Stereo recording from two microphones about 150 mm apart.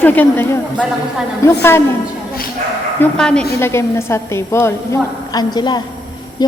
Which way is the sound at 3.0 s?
5° left (ahead or behind).